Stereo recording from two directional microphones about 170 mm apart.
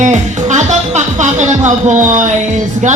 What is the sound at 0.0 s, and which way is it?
Music, 45° right (ahead or behind).